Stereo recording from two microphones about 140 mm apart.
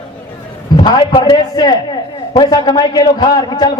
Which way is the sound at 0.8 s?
30° left (ahead or behind).